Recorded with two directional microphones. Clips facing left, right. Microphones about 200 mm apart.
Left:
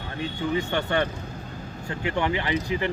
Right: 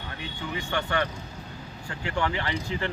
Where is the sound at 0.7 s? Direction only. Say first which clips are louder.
Left 3 dB; 25° left (ahead or behind).